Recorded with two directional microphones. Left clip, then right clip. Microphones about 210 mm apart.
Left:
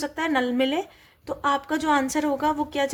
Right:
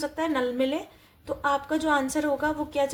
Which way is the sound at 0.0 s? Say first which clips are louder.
Left 2 dB; 40° left (ahead or behind).